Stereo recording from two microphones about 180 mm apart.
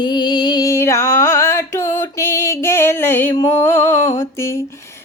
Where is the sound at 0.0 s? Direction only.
25° left (ahead or behind).